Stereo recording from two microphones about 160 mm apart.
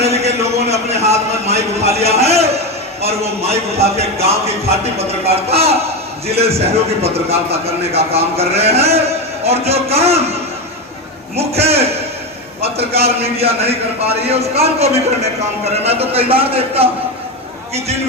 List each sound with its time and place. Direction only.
0.0 s a sound: 40° right (ahead or behind)
1.8 s a man's voice: 40° right (ahead or behind)
11.3 s a man's voice: 40° right (ahead or behind)